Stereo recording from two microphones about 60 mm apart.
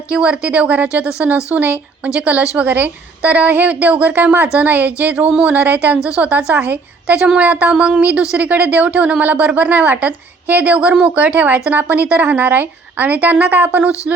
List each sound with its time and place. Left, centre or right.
0.1 s a woman's voice: centre